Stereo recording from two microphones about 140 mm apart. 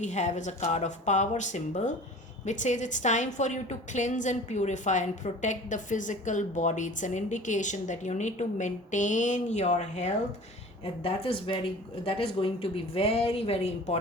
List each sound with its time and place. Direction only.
0.0 s a woman's voice: 55° left (ahead or behind)
11.0 s speech: 40° left (ahead or behind)